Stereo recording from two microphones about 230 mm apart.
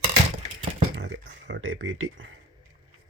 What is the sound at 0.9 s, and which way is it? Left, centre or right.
Speech, right.